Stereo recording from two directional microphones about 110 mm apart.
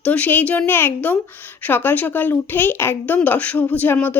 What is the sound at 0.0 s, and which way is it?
Speech, 15° left (ahead or behind).